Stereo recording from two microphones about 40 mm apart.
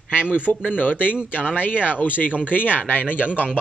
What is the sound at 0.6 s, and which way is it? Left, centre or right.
Speech, left.